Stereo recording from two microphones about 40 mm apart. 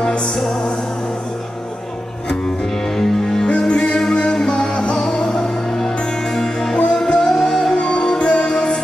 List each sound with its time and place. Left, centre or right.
3.0 s music: centre
3.4 s music: left
3.9 s music: centre